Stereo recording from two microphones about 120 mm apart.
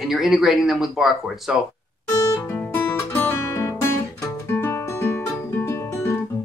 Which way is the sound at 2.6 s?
10° left (ahead or behind).